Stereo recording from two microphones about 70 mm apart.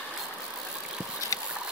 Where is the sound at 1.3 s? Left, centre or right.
Left.